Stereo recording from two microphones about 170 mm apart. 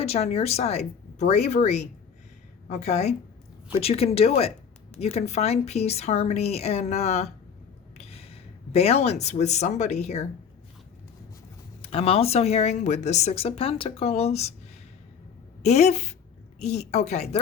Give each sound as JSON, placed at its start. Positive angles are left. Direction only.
{"t": 0.0, "sound": "a woman's voice", "side_deg": 35}
{"t": 11.8, "sound": "a woman's voice", "side_deg": 35}
{"t": 15.6, "sound": "a woman's voice", "side_deg": 40}